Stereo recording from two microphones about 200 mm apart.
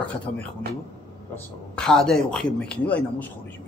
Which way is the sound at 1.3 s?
5° left (ahead or behind).